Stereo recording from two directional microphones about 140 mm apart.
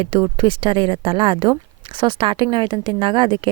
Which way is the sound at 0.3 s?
40° right (ahead or behind).